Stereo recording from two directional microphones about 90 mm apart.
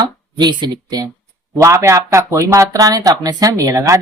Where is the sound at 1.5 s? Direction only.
35° right (ahead or behind).